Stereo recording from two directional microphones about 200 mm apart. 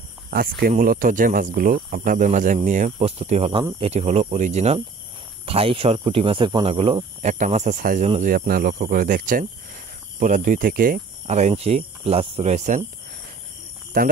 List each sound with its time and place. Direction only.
0.3 s speech: 45° right (ahead or behind)
13.9 s speech: 45° right (ahead or behind)